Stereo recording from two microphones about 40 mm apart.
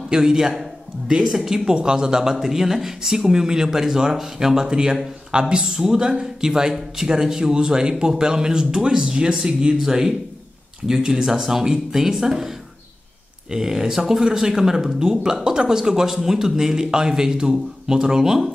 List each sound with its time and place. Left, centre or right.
0.1 s a man's voice: centre